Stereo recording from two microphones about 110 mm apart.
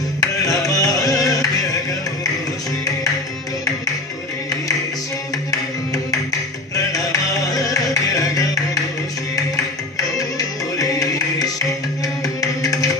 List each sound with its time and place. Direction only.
0.2 s music: 30° left (ahead or behind)
6.9 s music: 35° left (ahead or behind)
10.8 s music: 35° left (ahead or behind)